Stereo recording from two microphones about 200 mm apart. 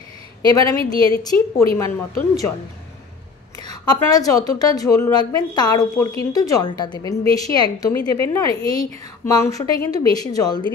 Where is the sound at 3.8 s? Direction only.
20° left (ahead or behind).